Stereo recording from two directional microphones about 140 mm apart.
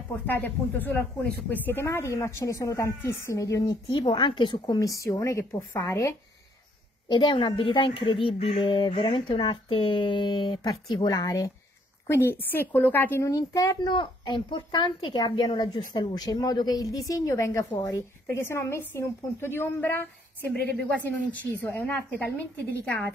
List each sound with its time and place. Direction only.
0.3 s a woman's voice: 15° left (ahead or behind)